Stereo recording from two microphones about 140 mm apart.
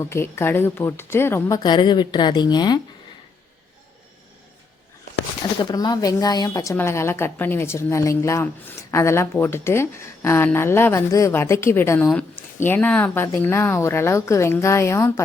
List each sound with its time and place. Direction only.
0.0 s speech: 20° left (ahead or behind)
5.7 s speech: 30° left (ahead or behind)